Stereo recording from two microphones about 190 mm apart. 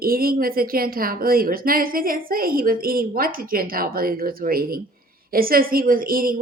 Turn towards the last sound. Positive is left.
turn(degrees=-50)  # may be behind; listen again after turning